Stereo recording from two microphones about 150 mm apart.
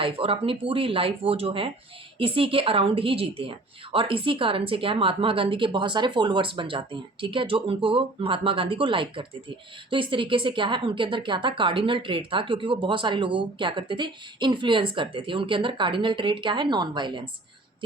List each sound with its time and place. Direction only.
0.0 s speech: 35° right (ahead or behind)